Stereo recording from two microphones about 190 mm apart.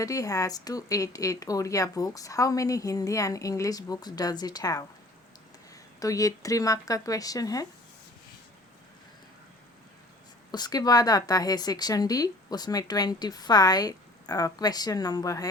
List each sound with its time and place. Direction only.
0.0 s a woman's voice: 20° left (ahead or behind)
6.0 s a woman's voice: 20° left (ahead or behind)
10.5 s speech: 20° left (ahead or behind)